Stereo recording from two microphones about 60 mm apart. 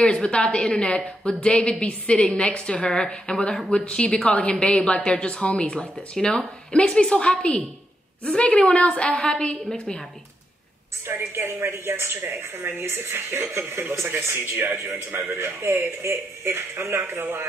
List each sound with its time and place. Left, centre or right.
0.0 s a woman's voice: centre
11.1 s a woman's voice: right